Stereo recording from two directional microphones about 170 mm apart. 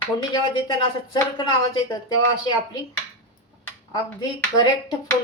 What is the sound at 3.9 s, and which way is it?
Speech, 25° left (ahead or behind).